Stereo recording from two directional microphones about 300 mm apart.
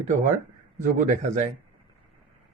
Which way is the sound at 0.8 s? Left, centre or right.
Right.